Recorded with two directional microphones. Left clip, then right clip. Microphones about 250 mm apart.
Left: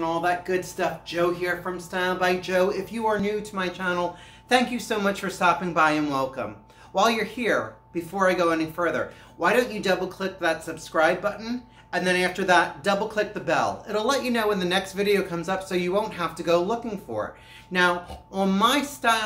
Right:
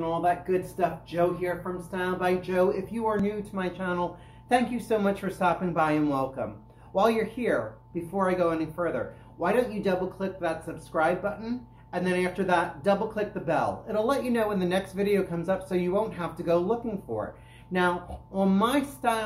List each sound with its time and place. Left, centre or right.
0.0 s speech: centre